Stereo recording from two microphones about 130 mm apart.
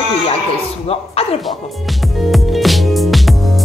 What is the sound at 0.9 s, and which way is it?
Speech, 50° left (ahead or behind).